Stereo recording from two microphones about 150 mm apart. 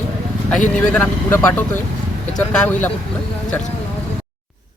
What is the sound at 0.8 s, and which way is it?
Speech, 10° left (ahead or behind).